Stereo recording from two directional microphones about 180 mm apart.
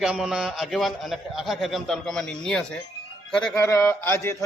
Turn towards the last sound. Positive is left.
turn(degrees=15)  # may be behind; listen again after turning